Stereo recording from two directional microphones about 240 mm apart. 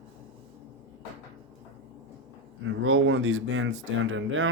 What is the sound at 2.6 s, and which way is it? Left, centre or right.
Speech, right.